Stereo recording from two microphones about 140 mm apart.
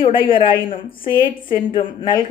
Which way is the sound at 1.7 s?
35° left (ahead or behind).